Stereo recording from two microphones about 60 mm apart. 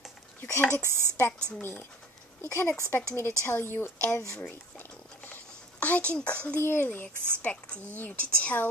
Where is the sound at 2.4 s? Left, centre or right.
Left.